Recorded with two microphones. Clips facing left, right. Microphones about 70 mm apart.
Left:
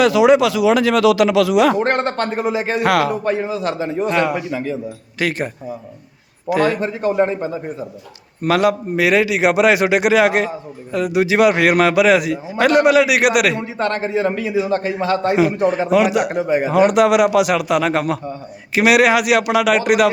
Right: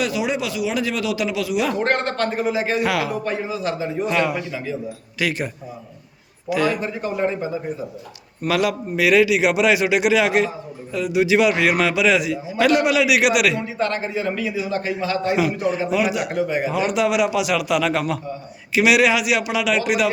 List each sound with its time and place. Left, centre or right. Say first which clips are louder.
0.0 s speech: left 11 dB; left
1.7 s a man's voice: left 3 dB; left
2.8 s a man's voice: left 6 dB; left
3.2 s a man's voice: left 4 dB; left
6.5 s a man's voice: left 4 dB; left
8.4 s a man's voice: left 5 dB; left
16.3 s speech: left 4 dB; left
16.6 s a man's voice: left 11 dB; left